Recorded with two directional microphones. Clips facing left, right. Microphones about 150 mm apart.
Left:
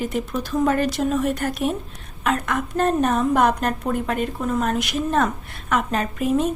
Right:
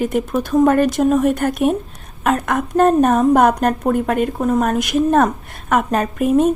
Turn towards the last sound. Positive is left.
turn(degrees=-50)  # may be behind; listen again after turning